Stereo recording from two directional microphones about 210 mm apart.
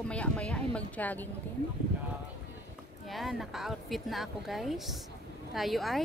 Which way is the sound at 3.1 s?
Centre (ahead or behind).